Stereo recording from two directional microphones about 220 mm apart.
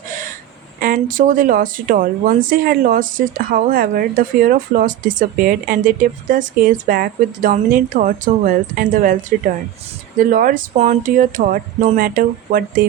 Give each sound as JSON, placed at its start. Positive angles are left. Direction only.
{"t": 0.8, "sound": "a woman's voice", "side_deg": -40}
{"t": 10.2, "sound": "a woman's voice", "side_deg": -35}